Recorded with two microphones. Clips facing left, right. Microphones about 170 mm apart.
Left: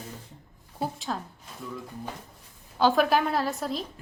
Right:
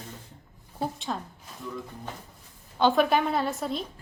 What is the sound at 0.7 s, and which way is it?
Speech, centre (ahead or behind).